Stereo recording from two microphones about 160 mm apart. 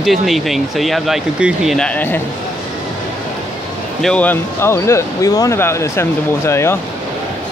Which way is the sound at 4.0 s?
10° left (ahead or behind).